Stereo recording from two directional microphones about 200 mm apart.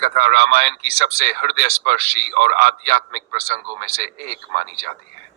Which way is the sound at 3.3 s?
30° right (ahead or behind).